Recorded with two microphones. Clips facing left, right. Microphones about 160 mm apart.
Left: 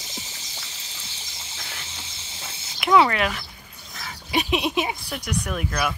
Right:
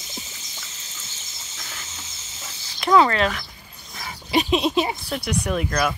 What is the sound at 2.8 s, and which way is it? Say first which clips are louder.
Speech: right 1 dB; 10° left (ahead or behind).